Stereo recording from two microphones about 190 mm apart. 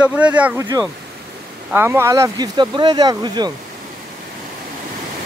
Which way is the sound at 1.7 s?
10° right (ahead or behind).